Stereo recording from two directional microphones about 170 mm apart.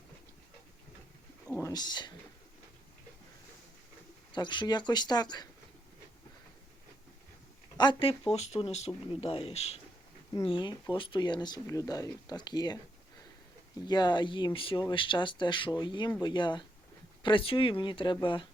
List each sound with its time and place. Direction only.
1.5 s speech: 20° left (ahead or behind)
4.3 s speech: 25° left (ahead or behind)
7.8 s speech: 30° left (ahead or behind)
13.8 s speech: 25° left (ahead or behind)